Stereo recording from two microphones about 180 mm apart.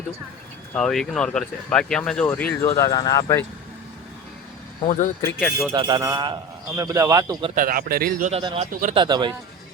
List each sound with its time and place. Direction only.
0.7 s speech: 5° left (ahead or behind); by 3.4 s 20° left (ahead or behind)
4.9 s speech: 45° left (ahead or behind)
5.4 s speech: centre (ahead or behind)
5.7 s a man's voice: 25° right (ahead or behind)
7.5 s speech: 55° right (ahead or behind)
8.3 s speech: 30° right (ahead or behind)
8.7 s speech: 50° right (ahead or behind)
9.0 s a man's voice: 25° right (ahead or behind)